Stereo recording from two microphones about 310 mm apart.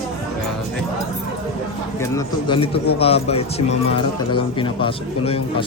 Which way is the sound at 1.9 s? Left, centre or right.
Centre.